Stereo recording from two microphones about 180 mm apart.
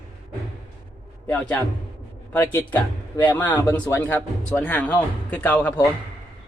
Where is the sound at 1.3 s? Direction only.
10° left (ahead or behind).